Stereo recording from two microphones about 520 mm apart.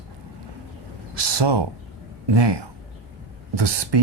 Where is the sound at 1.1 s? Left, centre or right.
Right.